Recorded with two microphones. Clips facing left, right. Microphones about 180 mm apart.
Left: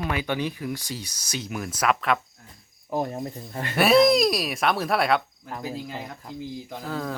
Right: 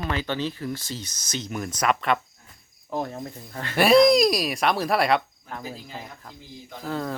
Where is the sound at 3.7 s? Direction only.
Centre (ahead or behind).